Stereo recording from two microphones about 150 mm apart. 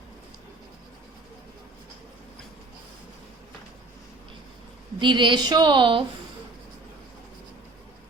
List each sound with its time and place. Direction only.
4.9 s a woman's voice: 30° right (ahead or behind)